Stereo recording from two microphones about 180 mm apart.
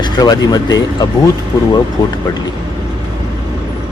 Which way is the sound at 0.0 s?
20° left (ahead or behind).